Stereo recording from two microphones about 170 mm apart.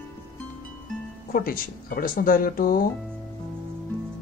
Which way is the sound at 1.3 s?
60° left (ahead or behind).